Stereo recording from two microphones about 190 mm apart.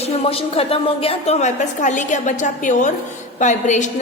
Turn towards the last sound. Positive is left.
turn(degrees=40)  # may be behind; listen again after turning